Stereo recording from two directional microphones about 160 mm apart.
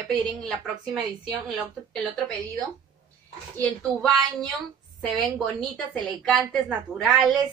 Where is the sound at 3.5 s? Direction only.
5° left (ahead or behind).